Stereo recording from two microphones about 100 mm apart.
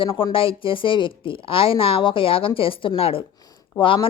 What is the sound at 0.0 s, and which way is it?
Speech, 60° left (ahead or behind).